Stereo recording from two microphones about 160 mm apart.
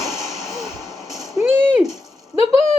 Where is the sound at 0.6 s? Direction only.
20° left (ahead or behind).